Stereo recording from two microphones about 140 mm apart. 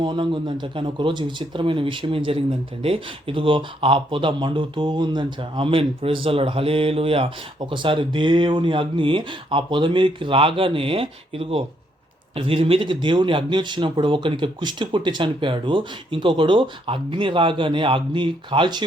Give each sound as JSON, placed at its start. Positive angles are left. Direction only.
{"t": 0.0, "sound": "speech", "side_deg": -35}